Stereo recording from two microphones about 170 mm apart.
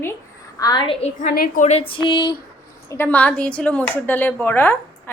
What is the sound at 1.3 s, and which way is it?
Speech, 55° left (ahead or behind).